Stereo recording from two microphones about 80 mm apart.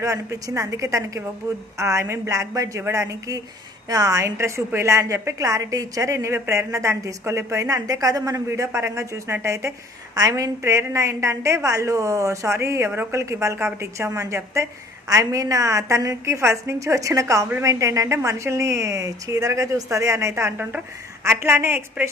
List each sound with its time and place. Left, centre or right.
0.0 s a woman's voice: right